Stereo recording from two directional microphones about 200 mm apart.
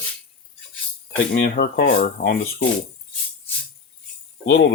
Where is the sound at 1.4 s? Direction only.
55° left (ahead or behind).